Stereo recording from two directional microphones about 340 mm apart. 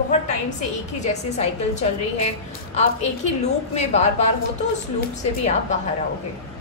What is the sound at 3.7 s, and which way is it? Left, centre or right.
Speech, centre.